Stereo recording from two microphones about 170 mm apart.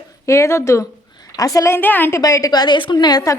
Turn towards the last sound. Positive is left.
turn(degrees=20)  # may be behind; listen again after turning